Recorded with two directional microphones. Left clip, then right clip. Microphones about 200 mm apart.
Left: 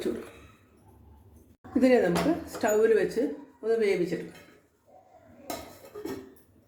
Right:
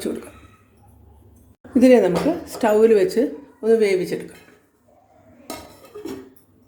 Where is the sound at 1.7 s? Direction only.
45° right (ahead or behind).